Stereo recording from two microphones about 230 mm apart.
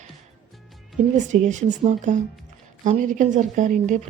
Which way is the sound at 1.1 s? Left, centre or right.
Right.